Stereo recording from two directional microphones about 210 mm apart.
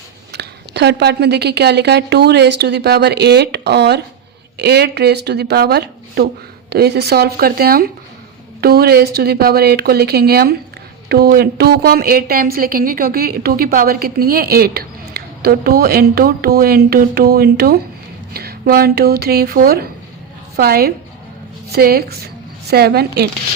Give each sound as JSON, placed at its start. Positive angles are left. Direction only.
{"t": 0.3, "sound": "a woman's voice", "side_deg": -55}